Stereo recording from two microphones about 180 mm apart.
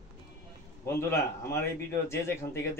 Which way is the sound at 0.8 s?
15° left (ahead or behind).